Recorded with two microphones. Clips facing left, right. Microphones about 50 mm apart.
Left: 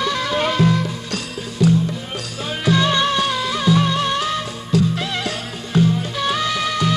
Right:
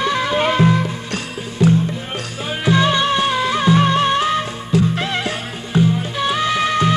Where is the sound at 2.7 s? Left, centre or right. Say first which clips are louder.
Right 2 dB; centre.